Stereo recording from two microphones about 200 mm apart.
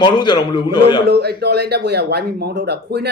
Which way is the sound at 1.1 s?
55° right (ahead or behind).